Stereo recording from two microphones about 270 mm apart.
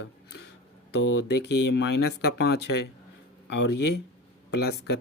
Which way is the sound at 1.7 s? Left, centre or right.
Left.